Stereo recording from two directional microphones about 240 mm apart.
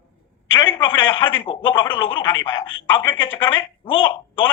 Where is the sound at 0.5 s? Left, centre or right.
Centre.